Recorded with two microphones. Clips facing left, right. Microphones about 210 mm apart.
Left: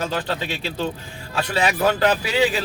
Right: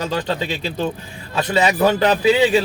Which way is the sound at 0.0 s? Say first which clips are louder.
Right 3 dB; 20° right (ahead or behind).